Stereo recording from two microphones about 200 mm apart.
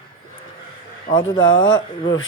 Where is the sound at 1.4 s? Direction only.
70° left (ahead or behind).